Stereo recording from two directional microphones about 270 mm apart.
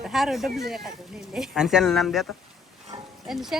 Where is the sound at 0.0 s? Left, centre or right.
Centre.